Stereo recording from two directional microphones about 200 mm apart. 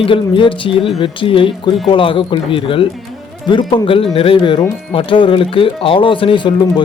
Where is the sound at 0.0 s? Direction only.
25° left (ahead or behind).